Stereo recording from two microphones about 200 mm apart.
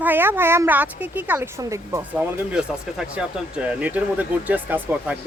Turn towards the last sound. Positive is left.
turn(degrees=-10)  # may be behind; listen again after turning